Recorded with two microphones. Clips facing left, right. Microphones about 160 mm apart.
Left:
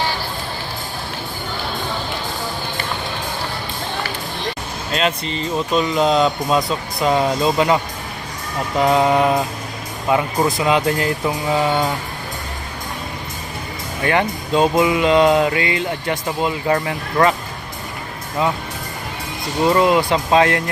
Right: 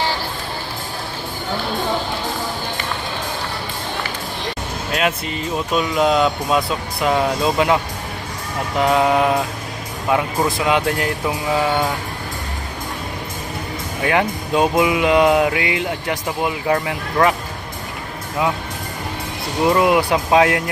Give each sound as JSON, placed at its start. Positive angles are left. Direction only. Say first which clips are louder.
{"t": 4.9, "sound": "speech", "louder": "left 1 dB", "side_deg": -5}
{"t": 8.8, "sound": "speech", "louder": "left 1 dB", "side_deg": 0}
{"t": 14.0, "sound": "speech", "louder": "even", "side_deg": -5}
{"t": 19.6, "sound": "speech", "louder": "even", "side_deg": -10}